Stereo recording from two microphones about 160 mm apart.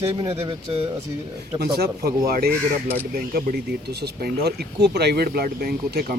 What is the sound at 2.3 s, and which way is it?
Speech, 70° right (ahead or behind).